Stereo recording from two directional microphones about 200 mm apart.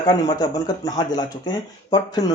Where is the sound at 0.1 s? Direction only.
20° left (ahead or behind).